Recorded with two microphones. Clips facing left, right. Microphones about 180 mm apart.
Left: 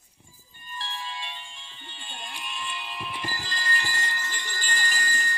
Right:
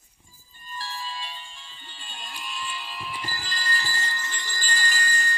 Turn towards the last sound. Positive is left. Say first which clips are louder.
# right 2 dB
turn(degrees=15)  # may be behind; listen again after turning